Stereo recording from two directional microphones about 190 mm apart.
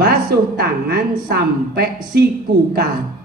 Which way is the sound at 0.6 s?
55° right (ahead or behind).